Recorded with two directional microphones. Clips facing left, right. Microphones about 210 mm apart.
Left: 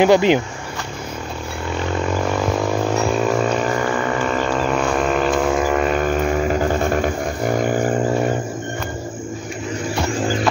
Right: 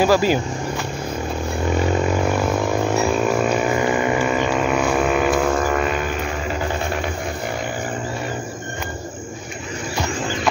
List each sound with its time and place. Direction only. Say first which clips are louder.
0.0 s speech: left 3 dB; 20° left (ahead or behind)
3.0 s a sound: even; 5° right (ahead or behind)
5.9 s vehicle: left 5 dB; 45° left (ahead or behind)